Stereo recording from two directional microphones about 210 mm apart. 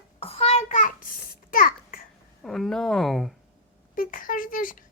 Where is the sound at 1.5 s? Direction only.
40° left (ahead or behind).